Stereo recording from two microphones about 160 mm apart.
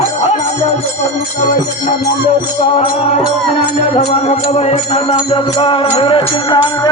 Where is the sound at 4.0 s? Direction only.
40° left (ahead or behind).